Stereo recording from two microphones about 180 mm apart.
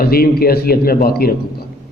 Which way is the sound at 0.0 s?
60° left (ahead or behind).